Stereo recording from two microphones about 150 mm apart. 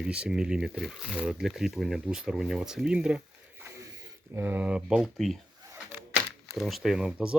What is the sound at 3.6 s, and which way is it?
Mechanisms, 15° right (ahead or behind).